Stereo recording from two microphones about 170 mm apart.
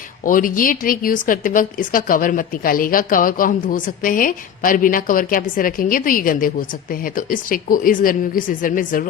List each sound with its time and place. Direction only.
0.3 s speech: 50° left (ahead or behind)